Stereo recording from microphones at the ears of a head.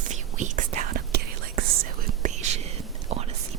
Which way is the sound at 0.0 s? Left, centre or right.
Right.